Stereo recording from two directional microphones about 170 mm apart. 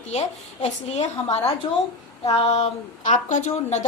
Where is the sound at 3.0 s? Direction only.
45° left (ahead or behind).